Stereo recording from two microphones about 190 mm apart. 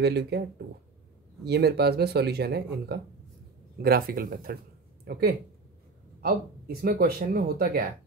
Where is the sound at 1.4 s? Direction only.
60° right (ahead or behind).